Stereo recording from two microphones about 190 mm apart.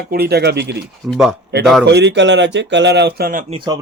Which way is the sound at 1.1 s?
Centre (ahead or behind).